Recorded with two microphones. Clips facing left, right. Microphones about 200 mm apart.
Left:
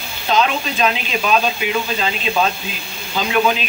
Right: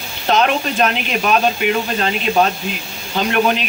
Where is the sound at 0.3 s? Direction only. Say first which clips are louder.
Right 2 dB; 55° right (ahead or behind).